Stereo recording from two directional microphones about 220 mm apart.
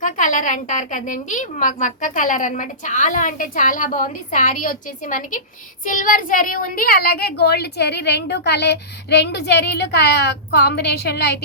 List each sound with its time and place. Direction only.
0.0 s a woman's voice: 35° left (ahead or behind)